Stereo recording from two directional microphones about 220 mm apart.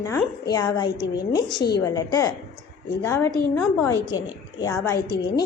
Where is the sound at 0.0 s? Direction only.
15° left (ahead or behind).